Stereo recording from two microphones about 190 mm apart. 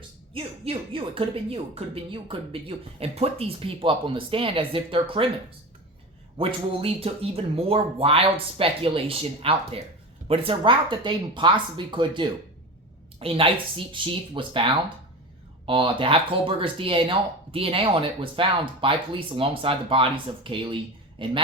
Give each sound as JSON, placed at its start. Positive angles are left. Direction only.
{"t": 0.3, "sound": "speech", "side_deg": -30}
{"t": 6.3, "sound": "speech", "side_deg": -30}